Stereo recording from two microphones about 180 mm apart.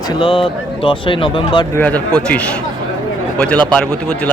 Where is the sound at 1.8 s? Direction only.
5° left (ahead or behind).